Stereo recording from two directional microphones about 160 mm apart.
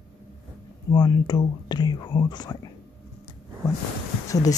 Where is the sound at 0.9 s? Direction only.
25° left (ahead or behind).